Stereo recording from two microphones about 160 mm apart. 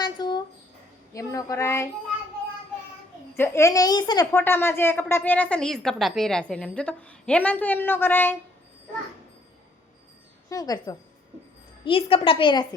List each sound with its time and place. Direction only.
0.0 s a sound: 25° left (ahead or behind)
1.1 s a woman's voice: 20° left (ahead or behind)
3.3 s a woman's voice: 15° left (ahead or behind)
4.3 s a woman's voice: 15° left (ahead or behind)
10.5 s a woman's voice: 25° left (ahead or behind)
11.9 s a woman's voice: 35° left (ahead or behind)